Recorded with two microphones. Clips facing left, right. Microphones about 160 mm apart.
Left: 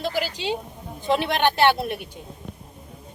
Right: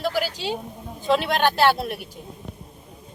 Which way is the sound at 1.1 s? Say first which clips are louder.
Right 1 dB; 20° left (ahead or behind).